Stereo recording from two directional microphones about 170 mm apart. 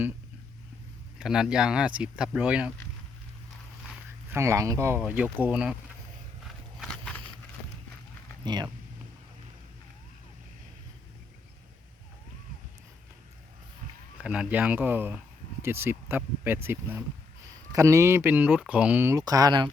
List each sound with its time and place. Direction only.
1.2 s speech: 5° right (ahead or behind)
4.3 s speech: 15° right (ahead or behind)
6.7 s a sound: 5° left (ahead or behind)
8.4 s speech: 25° right (ahead or behind)
14.2 s speech: 5° right (ahead or behind); by 19.7 s 25° right (ahead or behind)